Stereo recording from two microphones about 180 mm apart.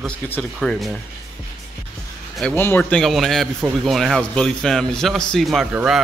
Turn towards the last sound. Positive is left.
turn(degrees=-5)  # may be behind; listen again after turning